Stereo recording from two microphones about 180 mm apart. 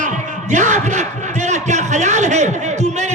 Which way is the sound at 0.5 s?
40° right (ahead or behind).